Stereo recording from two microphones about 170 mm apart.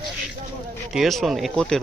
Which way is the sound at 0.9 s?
Centre (ahead or behind).